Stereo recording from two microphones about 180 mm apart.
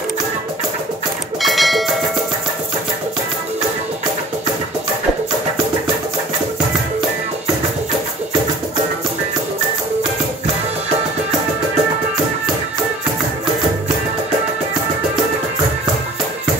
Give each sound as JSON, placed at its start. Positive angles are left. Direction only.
{"t": 1.4, "sound": "music", "side_deg": 0}